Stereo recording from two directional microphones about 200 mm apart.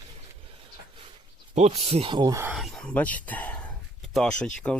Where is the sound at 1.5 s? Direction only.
30° right (ahead or behind); by 2.5 s 15° right (ahead or behind).